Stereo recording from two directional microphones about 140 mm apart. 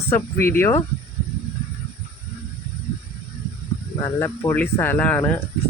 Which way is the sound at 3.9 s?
25° left (ahead or behind).